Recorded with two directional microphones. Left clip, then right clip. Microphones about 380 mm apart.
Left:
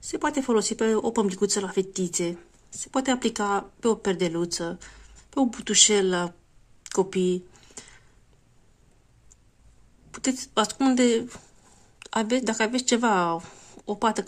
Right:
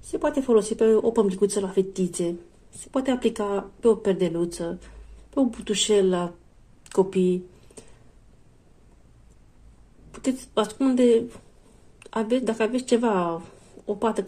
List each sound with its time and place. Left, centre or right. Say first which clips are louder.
0.1 s speech: right 3 dB; centre
6.8 s a sound: right 3 dB; centre
10.1 s speech: even; centre